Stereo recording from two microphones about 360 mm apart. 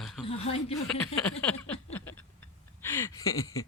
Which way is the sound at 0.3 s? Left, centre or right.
Centre.